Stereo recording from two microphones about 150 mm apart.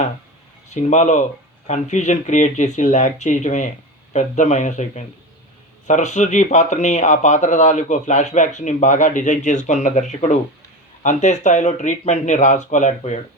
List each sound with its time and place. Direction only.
0.7 s speech: 50° left (ahead or behind)